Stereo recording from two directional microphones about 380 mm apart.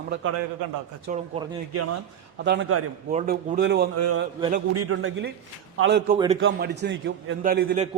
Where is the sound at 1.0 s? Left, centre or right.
Centre.